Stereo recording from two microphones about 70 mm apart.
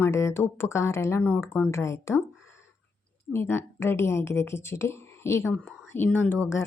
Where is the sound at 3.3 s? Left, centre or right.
Left.